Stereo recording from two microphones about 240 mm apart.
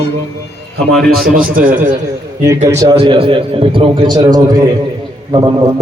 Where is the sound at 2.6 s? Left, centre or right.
Centre.